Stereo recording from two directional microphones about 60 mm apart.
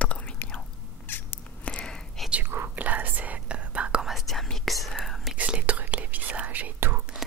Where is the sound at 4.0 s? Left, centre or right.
Centre.